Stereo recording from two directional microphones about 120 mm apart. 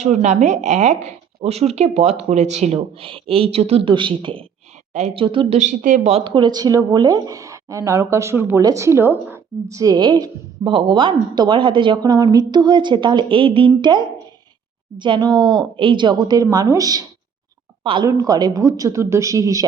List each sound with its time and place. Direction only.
0.0 s a woman's voice: 80° right; by 5.5 s 45° right (ahead or behind)
5.5 s speech: 90° right
6.2 s a woman's voice: 40° right (ahead or behind)
17.8 s a woman's voice: 40° right (ahead or behind)
18.1 s a woman's voice: 30° right (ahead or behind)